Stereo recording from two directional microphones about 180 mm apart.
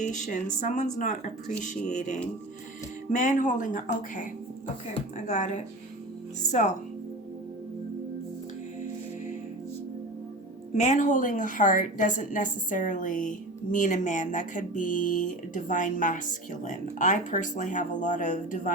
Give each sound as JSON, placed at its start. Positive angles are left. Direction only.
{"t": 0.0, "sound": "speech", "side_deg": 45}
{"t": 5.1, "sound": "speech", "side_deg": 40}
{"t": 10.8, "sound": "speech", "side_deg": 40}